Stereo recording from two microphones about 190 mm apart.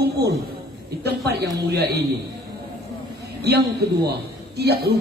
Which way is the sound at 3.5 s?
60° right (ahead or behind).